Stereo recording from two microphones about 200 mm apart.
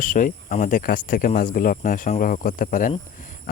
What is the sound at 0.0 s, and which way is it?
Speech, 40° left (ahead or behind).